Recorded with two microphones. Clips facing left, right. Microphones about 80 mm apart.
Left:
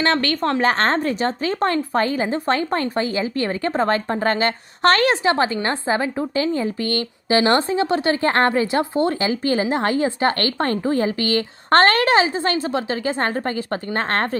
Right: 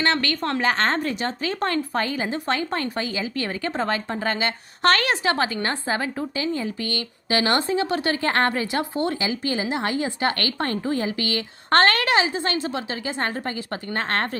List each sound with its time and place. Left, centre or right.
0.0 s a woman's voice: left
9.2 s a woman's voice: left